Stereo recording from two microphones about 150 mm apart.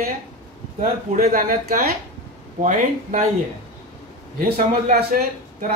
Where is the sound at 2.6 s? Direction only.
55° right (ahead or behind).